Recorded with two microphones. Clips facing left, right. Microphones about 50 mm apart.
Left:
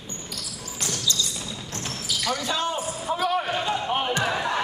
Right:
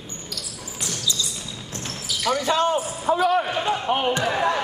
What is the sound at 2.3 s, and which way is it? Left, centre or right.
Basketball bounce, right.